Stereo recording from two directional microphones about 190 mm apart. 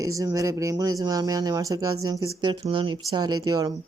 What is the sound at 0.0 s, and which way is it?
Speech, 15° right (ahead or behind).